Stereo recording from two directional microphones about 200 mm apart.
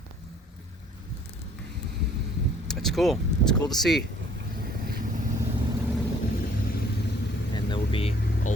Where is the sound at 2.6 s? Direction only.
Centre (ahead or behind).